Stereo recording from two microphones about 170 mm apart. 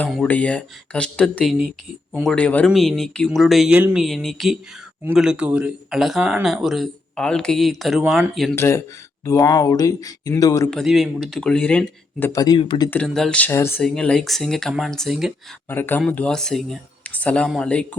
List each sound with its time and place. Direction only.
0.0 s speech: 10° left (ahead or behind)
8.0 s speech: 10° right (ahead or behind)
8.5 s speech: 15° left (ahead or behind)
10.7 s speech: centre (ahead or behind)
12.3 s speech: 20° left (ahead or behind)
12.9 s speech: 5° left (ahead or behind)
13.8 s speech: 5° left (ahead or behind)
15.7 s speech: 10° left (ahead or behind)